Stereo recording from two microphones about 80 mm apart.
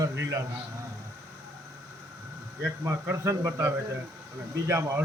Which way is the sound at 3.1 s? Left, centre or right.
Right.